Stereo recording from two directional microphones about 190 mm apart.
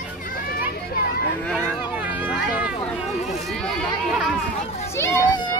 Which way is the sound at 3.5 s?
Centre (ahead or behind).